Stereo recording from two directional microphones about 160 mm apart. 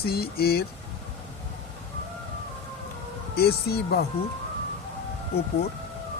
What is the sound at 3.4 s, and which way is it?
Speech, 80° left.